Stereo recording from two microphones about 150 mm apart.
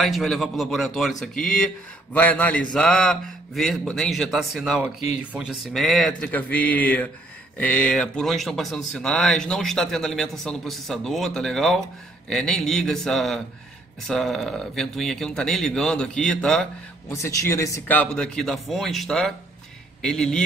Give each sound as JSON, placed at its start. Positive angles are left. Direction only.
{"t": 0.0, "sound": "a man's voice", "side_deg": 0}
{"t": 17.1, "sound": "a man's voice", "side_deg": 20}